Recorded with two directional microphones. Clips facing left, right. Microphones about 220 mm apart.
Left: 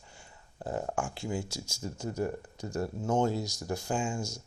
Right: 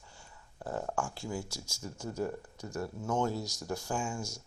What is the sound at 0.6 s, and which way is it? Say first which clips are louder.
Speech: left 2 dB; 20° left (ahead or behind).